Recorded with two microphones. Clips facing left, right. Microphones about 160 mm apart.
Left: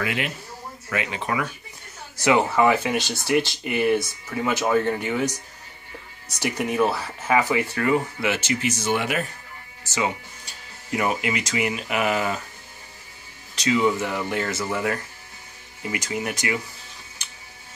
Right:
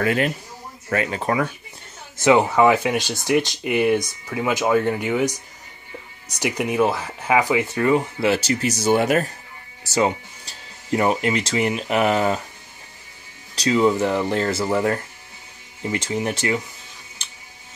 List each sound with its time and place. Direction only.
0.0 s speech: 40° right (ahead or behind)
2.2 s speech: 15° right (ahead or behind)
8.2 s speech: 35° right (ahead or behind)
13.6 s speech: 30° right (ahead or behind)